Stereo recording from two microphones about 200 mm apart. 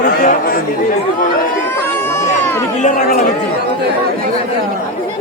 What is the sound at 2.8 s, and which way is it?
Speech, 35° left (ahead or behind).